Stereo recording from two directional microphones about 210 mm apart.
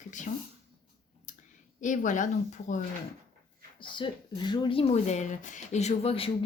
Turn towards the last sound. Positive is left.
turn(degrees=25)  # may be behind; listen again after turning